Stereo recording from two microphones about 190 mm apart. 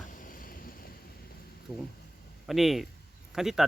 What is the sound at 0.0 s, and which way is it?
Vehicle, 45° left (ahead or behind).